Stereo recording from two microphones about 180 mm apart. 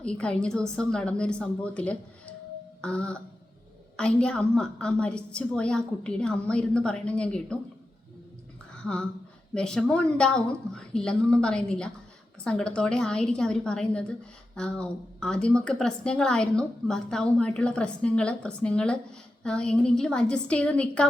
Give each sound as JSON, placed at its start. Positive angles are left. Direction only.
{"t": 0.0, "sound": "a woman's voice", "side_deg": 5}
{"t": 8.7, "sound": "a sound", "side_deg": 5}
{"t": 9.6, "sound": "a woman's voice", "side_deg": 5}